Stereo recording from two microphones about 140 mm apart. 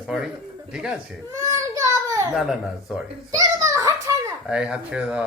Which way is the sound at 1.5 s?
25° right (ahead or behind).